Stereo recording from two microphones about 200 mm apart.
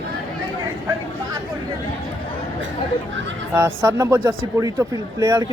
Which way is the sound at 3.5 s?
15° right (ahead or behind).